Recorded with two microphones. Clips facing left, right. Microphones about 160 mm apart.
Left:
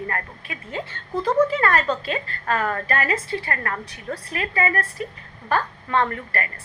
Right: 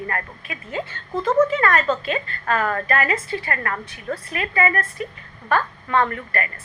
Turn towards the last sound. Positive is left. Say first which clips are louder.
# right 2 dB
turn(degrees=30)  # may be behind; listen again after turning